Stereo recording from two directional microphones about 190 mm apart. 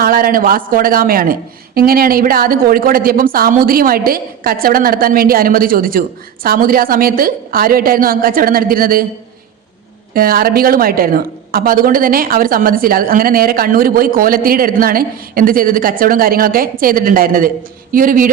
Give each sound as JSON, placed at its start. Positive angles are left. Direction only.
{"t": 0.0, "sound": "a man's voice", "side_deg": -50}
{"t": 10.2, "sound": "a man's voice", "side_deg": -50}